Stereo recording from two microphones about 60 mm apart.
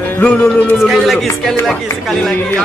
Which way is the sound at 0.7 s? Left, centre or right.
Centre.